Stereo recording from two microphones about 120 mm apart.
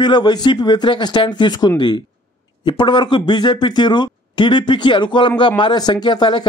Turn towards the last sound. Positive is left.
turn(degrees=40)  # may be behind; listen again after turning